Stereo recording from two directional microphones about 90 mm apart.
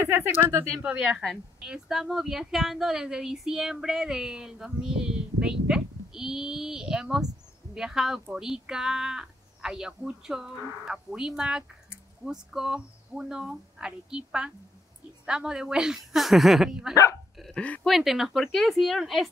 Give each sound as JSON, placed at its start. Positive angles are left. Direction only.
{"t": 0.0, "sound": "speech", "side_deg": -25}
{"t": 1.6, "sound": "speech", "side_deg": -5}
{"t": 17.4, "sound": "speech", "side_deg": 10}
{"t": 17.8, "sound": "speech", "side_deg": 0}